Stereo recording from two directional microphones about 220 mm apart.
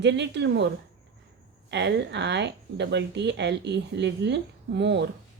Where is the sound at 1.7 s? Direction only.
50° right (ahead or behind).